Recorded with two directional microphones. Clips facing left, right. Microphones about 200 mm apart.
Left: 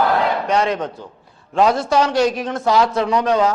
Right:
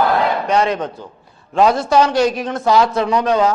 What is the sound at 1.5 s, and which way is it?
Speech, 10° right (ahead or behind).